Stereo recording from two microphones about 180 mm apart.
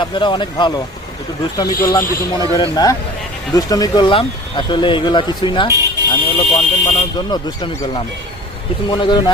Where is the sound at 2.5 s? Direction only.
20° left (ahead or behind).